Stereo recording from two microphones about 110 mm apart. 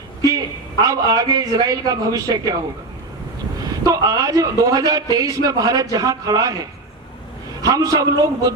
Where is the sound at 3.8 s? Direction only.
30° right (ahead or behind).